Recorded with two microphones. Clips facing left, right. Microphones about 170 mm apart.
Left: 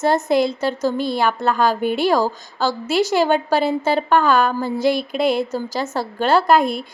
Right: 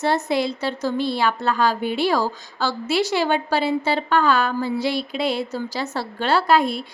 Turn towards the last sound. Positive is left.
turn(degrees=50)  # may be behind; listen again after turning